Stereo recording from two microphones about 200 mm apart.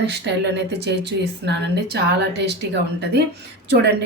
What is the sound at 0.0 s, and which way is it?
Speech, 55° right (ahead or behind).